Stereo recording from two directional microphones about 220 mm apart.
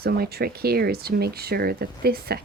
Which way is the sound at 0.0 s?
45° right (ahead or behind).